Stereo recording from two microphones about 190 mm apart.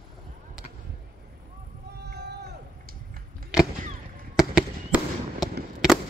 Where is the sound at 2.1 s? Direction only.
60° right (ahead or behind).